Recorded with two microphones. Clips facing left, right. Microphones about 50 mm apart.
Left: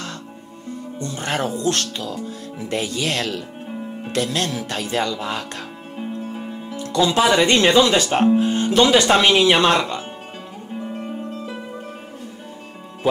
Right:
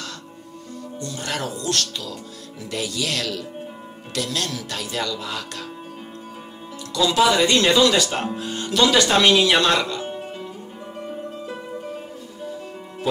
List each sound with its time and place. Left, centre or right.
0.7 s speech: left
6.9 s speech: left